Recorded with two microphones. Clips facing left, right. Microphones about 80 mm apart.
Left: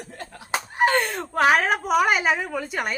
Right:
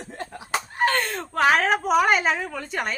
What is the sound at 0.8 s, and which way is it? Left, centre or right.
Slap, centre.